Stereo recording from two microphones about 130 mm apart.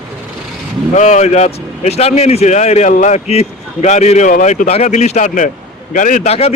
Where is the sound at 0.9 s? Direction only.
65° left (ahead or behind).